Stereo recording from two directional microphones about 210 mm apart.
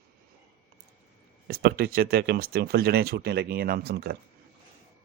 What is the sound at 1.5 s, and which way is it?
Speech, 50° right (ahead or behind).